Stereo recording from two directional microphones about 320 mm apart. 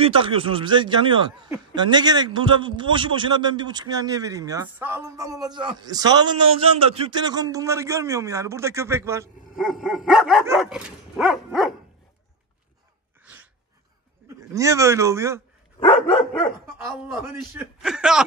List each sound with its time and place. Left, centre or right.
0.0 s a man's voice: centre
9.6 s dog: centre
13.2 s a sound: centre
14.5 s a man's voice: centre
17.6 s dog: centre